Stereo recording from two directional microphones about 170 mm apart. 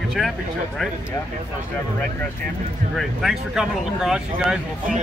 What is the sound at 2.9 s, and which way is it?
Speech, centre (ahead or behind).